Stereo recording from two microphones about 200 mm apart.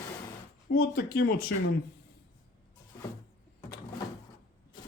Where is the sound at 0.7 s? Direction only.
50° left (ahead or behind).